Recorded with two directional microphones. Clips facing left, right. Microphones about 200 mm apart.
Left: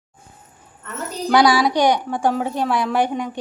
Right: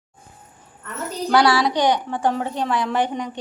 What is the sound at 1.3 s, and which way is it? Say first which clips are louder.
A woman's voice: left 2 dB; 15° left (ahead or behind).